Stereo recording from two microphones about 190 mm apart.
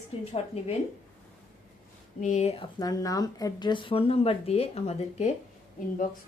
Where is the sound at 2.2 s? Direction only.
40° left (ahead or behind).